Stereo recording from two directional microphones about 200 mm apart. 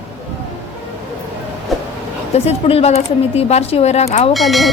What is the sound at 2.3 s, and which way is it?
A woman's voice, 30° left (ahead or behind).